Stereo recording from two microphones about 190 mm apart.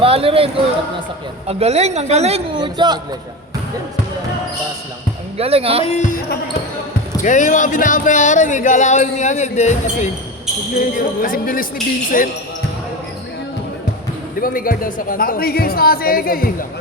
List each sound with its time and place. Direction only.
0.0 s a man's voice: 30° right (ahead or behind)
5.4 s a man's voice: 30° right (ahead or behind)
5.8 s speech: 35° left (ahead or behind)
7.2 s speech: 40° left (ahead or behind)
10.8 s speech: 45° left (ahead or behind)
14.4 s speech: 50° left (ahead or behind)